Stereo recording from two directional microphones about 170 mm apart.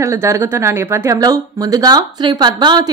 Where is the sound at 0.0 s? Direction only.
15° right (ahead or behind).